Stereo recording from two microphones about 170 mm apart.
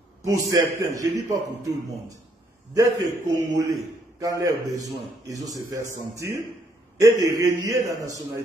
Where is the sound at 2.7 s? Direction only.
20° right (ahead or behind).